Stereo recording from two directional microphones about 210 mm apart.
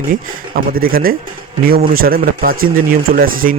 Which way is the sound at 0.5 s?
45° right (ahead or behind).